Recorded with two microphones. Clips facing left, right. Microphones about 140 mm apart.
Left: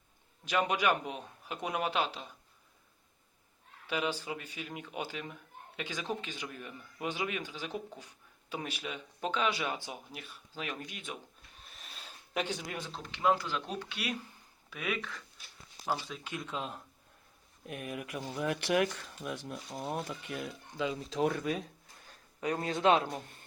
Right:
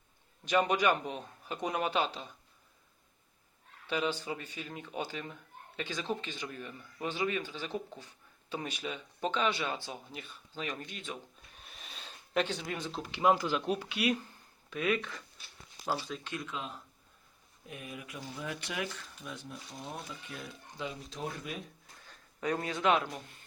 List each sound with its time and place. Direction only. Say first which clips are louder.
0.4 s a man's voice: right 2 dB; centre (ahead or behind)
3.8 s speech: right 1 dB; 5° left (ahead or behind)
10.2 s speech: right 1 dB; 5° left (ahead or behind)
11.6 s a sound: right 2 dB; centre (ahead or behind)
12.9 s a man's voice: right 2 dB; 10° right (ahead or behind)
16.5 s a man's voice: left 2 dB; 40° left (ahead or behind)
17.7 s speech: left 5 dB; 60° left (ahead or behind)
22.6 s speech: left 3 dB; 30° left (ahead or behind)